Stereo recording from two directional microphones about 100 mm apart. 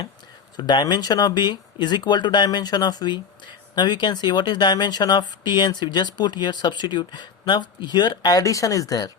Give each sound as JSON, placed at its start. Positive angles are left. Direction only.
{"t": 0.5, "sound": "speech", "side_deg": 45}